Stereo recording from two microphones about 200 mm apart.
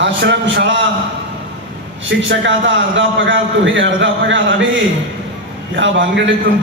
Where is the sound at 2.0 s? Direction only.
65° right (ahead or behind).